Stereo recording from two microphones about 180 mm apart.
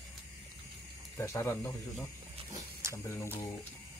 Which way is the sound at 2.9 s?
15° left (ahead or behind).